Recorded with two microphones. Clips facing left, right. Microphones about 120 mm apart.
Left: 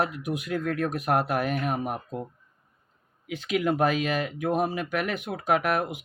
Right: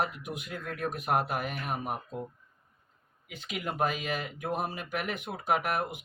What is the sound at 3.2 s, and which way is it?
Speech, 90° left.